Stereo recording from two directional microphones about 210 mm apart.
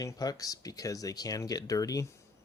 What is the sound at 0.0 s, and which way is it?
Speech, 15° left (ahead or behind).